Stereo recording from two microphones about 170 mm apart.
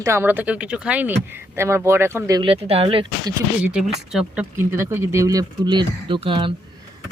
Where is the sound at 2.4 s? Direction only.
35° right (ahead or behind).